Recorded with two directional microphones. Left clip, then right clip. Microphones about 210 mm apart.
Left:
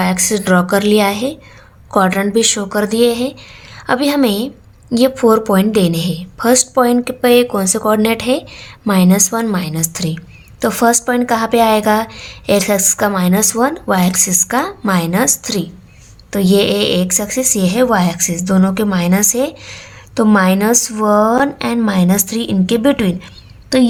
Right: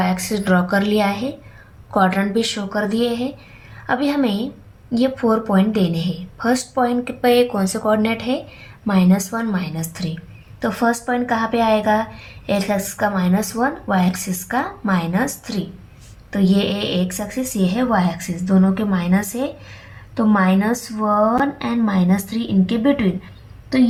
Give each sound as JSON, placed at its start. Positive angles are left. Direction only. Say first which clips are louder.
{"t": 0.0, "sound": "a woman's voice", "louder": "left 5 dB", "side_deg": 40}